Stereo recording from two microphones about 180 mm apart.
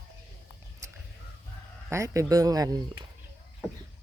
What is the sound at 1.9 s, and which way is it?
Speech, 15° right (ahead or behind).